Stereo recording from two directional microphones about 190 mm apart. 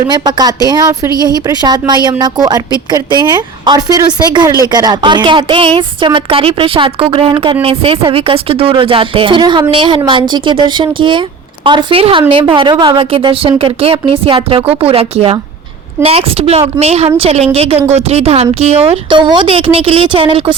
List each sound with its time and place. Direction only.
0.1 s a woman's voice: 20° right (ahead or behind)